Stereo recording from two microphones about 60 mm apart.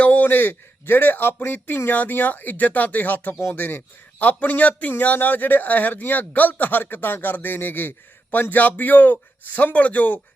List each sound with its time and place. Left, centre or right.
0.0 s a man's voice: left